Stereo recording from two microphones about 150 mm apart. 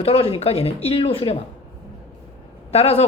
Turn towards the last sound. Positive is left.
turn(degrees=45)  # may be behind; listen again after turning